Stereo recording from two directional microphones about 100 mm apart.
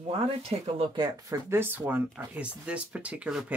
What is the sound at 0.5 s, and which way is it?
Speech, 60° right (ahead or behind).